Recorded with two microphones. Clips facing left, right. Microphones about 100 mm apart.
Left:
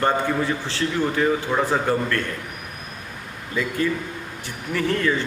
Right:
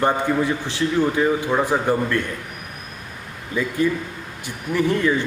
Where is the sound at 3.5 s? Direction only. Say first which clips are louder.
Right 2 dB; 15° right (ahead or behind).